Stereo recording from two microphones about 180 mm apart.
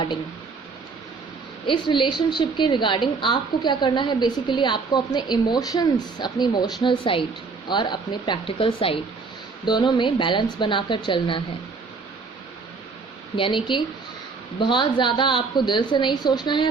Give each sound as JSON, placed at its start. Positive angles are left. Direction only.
{"t": 1.6, "sound": "a woman's voice", "side_deg": 25}
{"t": 13.3, "sound": "a woman's voice", "side_deg": 30}